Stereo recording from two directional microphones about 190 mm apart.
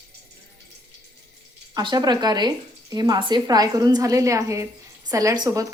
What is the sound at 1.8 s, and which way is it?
A woman's voice, 20° right (ahead or behind).